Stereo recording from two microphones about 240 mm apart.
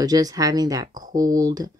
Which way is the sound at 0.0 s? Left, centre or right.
Centre.